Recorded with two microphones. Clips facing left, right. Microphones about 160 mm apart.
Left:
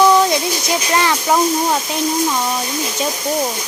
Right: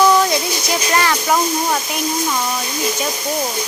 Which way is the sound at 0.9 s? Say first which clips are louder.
Left 2 dB; 15° left (ahead or behind).